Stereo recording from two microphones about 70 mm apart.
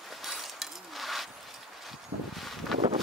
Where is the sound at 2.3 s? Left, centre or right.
Centre.